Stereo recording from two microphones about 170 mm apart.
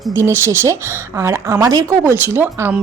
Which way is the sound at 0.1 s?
15° right (ahead or behind).